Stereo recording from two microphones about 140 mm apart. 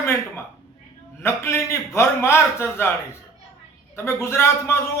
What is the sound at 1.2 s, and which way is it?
A man's voice, 15° left (ahead or behind).